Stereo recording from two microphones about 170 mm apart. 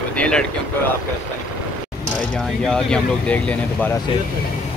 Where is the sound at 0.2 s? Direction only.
5° left (ahead or behind).